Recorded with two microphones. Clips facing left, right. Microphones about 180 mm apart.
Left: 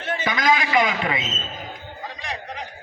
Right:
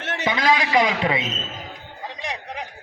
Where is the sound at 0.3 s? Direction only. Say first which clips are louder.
Right 1 dB; 30° right (ahead or behind).